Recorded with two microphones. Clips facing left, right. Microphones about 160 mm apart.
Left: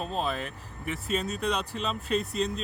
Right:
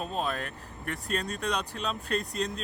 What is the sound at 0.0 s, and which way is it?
Speech, centre (ahead or behind).